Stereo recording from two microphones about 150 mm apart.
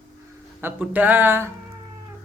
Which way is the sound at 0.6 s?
10° right (ahead or behind).